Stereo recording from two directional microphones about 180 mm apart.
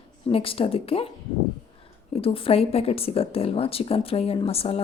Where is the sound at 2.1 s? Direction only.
30° left (ahead or behind).